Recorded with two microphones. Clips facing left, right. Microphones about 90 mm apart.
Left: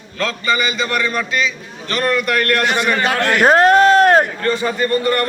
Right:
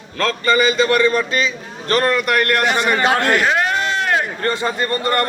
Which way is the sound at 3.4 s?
45° left (ahead or behind).